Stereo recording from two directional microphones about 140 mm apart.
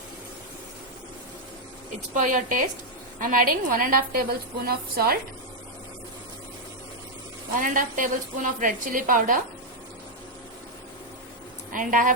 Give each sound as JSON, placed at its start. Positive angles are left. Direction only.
{"t": 2.1, "sound": "a woman's voice", "side_deg": -65}
{"t": 3.2, "sound": "a woman's voice", "side_deg": -80}
{"t": 7.6, "sound": "a woman's voice", "side_deg": -75}
{"t": 11.7, "sound": "a woman's voice", "side_deg": -70}